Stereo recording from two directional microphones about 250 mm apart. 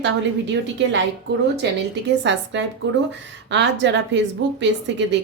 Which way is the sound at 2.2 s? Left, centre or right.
Right.